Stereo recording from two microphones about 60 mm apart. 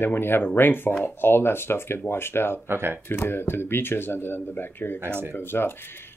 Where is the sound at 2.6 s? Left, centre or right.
Right.